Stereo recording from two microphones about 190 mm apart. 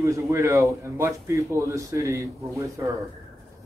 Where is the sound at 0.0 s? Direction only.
15° right (ahead or behind).